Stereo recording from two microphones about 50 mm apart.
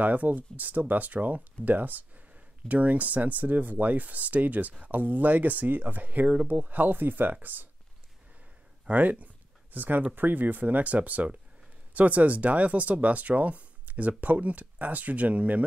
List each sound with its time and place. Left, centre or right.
0.0 s speech: right
8.8 s a sound: right
10.1 s speech: right